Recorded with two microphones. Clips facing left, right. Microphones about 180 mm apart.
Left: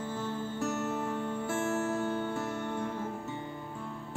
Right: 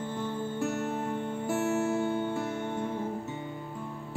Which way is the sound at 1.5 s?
15° right (ahead or behind).